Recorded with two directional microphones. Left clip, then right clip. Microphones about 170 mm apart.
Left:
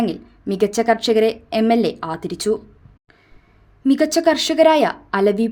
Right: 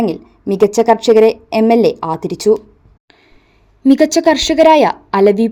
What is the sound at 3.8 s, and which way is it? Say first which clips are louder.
A woman's voice: right 5 dB; 20° right (ahead or behind).